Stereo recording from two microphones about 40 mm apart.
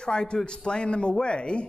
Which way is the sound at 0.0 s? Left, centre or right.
Left.